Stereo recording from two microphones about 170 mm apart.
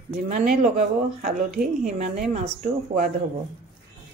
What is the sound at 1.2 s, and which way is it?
Speech, 55° right (ahead or behind).